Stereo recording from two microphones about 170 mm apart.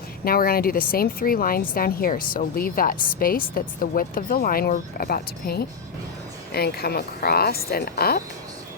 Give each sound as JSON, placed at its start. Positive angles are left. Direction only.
{"t": 0.3, "sound": "a woman's voice", "side_deg": 60}